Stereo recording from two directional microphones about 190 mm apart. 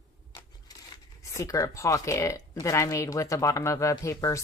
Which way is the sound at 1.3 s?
15° left (ahead or behind).